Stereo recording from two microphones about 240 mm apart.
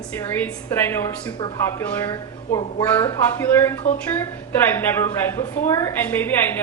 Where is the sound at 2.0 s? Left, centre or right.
Centre.